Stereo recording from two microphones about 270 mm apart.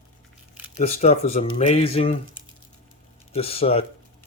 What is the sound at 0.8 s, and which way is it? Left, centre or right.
Speech, left.